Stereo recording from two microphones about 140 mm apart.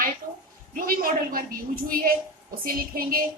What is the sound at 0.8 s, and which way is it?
A woman's voice, 90° right.